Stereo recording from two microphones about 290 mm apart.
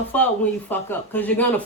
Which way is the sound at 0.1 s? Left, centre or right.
Centre.